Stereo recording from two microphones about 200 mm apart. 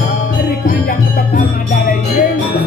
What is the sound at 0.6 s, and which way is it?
Music, 45° left (ahead or behind).